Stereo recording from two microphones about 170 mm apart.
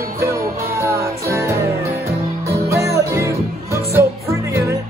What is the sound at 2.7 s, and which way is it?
Music, 15° right (ahead or behind).